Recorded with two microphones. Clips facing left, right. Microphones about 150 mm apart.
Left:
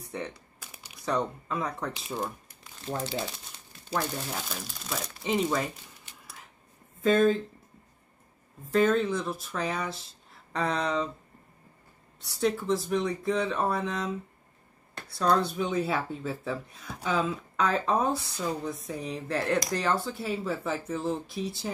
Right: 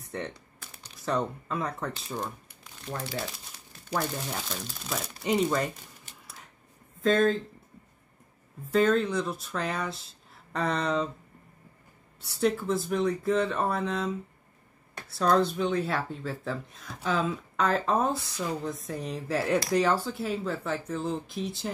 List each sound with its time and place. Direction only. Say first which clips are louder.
0.0 s speech: even; centre (ahead or behind)
0.6 s typing: even; 10° left (ahead or behind)
1.0 s speech: even; centre (ahead or behind)
3.0 s speech: left 2 dB; 25° left (ahead or behind)
3.9 s speech: even; centre (ahead or behind)
7.0 s speech: left 1 dB; 5° left (ahead or behind)
8.7 s speech: even; centre (ahead or behind)
12.3 s speech: even; centre (ahead or behind)